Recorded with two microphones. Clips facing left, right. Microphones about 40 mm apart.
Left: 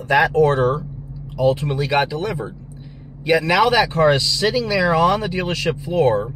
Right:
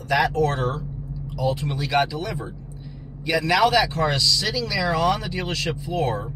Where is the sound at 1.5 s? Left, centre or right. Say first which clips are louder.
Left 6 dB; left.